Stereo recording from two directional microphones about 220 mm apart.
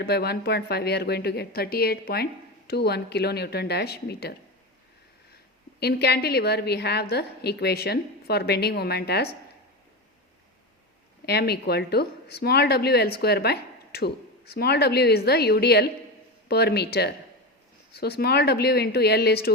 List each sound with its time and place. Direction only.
0.0 s a woman's voice: 45° left (ahead or behind)
5.8 s a woman's voice: 45° left (ahead or behind)
11.3 s a woman's voice: 45° left (ahead or behind)